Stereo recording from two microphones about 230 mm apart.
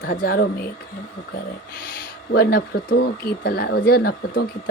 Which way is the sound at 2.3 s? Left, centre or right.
Left.